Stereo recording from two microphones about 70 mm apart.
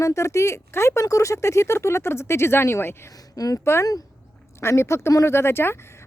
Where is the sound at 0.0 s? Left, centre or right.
Left.